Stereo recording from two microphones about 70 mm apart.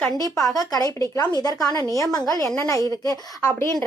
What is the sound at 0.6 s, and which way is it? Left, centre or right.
Speech, left.